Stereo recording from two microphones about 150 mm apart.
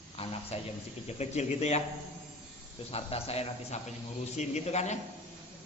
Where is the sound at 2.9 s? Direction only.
40° left (ahead or behind).